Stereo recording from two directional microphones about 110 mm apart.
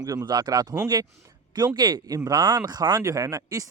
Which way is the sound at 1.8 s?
40° right (ahead or behind).